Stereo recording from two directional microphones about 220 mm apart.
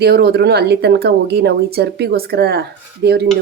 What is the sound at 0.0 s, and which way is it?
A woman's voice, 45° right (ahead or behind).